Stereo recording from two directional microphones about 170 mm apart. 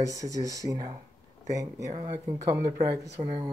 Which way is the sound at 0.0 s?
20° right (ahead or behind).